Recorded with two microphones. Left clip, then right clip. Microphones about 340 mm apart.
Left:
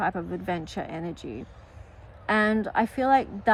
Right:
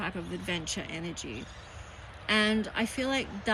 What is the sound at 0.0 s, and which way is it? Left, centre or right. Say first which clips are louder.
Speech: left 8 dB; left.